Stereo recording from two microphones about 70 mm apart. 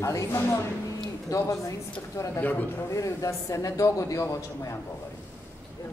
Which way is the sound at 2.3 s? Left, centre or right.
Left.